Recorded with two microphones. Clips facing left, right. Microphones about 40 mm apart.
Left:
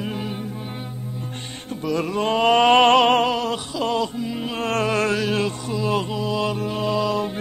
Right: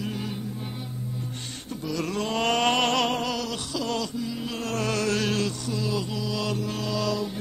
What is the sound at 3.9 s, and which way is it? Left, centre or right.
Music, left.